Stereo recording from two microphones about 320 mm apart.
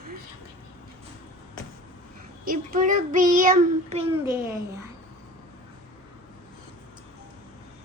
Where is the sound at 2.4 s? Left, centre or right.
Right.